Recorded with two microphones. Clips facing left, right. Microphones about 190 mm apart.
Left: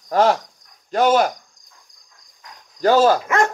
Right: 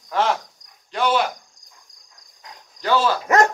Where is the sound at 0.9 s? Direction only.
45° left (ahead or behind).